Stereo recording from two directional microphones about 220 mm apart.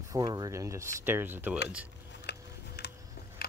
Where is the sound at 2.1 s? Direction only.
50° left (ahead or behind).